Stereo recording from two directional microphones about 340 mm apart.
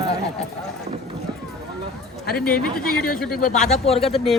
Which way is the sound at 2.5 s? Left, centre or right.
Left.